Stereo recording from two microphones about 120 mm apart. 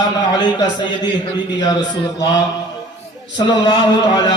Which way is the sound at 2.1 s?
30° left (ahead or behind).